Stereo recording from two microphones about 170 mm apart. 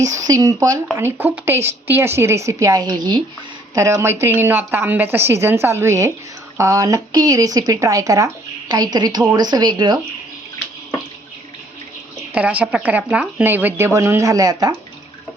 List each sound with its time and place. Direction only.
0.0 s speech: 20° right (ahead or behind)
12.3 s speech: 10° right (ahead or behind)